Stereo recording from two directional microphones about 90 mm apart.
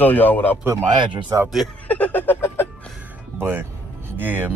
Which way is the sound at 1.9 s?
15° left (ahead or behind).